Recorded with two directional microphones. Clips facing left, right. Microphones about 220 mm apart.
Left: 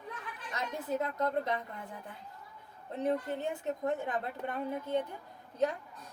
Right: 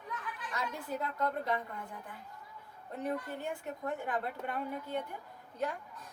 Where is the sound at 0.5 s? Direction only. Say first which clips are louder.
Left 4 dB; 20° left (ahead or behind).